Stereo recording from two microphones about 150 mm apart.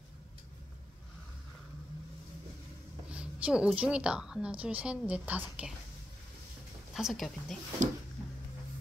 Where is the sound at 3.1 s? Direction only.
10° right (ahead or behind).